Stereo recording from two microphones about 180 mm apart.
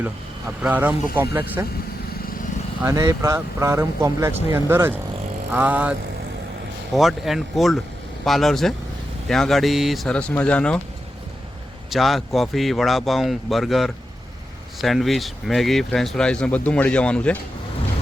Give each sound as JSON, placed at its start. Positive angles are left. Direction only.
{"t": 0.0, "sound": "speech", "side_deg": -10}
{"t": 2.8, "sound": "speech", "side_deg": -20}
{"t": 11.9, "sound": "speech", "side_deg": 0}